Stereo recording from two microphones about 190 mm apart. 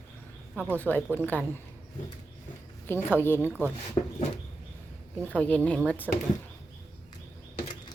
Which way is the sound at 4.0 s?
25° left (ahead or behind).